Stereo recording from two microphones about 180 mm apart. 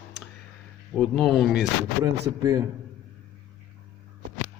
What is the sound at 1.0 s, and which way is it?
Speech, centre (ahead or behind).